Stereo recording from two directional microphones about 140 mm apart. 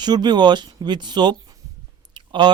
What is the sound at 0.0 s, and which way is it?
Speech, 30° right (ahead or behind).